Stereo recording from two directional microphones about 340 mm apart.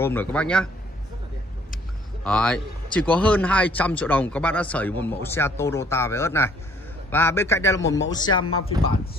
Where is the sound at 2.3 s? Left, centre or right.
Centre.